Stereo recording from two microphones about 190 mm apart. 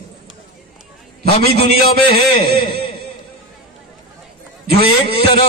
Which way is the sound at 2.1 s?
25° left (ahead or behind).